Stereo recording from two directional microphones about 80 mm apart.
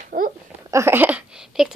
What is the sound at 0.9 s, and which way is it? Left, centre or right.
Speech, right.